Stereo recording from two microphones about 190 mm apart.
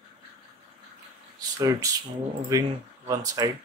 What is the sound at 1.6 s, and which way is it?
Speech, 20° right (ahead or behind).